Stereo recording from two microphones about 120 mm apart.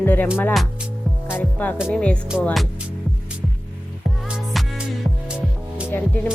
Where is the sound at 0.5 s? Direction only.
Centre (ahead or behind).